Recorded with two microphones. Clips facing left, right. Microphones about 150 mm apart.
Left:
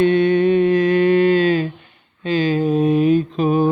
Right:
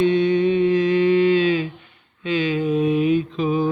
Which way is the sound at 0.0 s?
55° left (ahead or behind).